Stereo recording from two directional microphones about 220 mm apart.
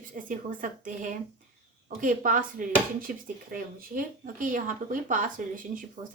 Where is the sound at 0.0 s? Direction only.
40° right (ahead or behind).